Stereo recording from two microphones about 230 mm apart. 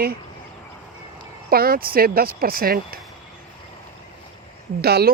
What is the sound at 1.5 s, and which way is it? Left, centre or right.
Speech, right.